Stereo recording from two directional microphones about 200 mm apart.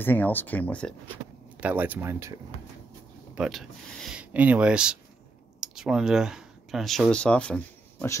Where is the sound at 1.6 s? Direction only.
10° right (ahead or behind).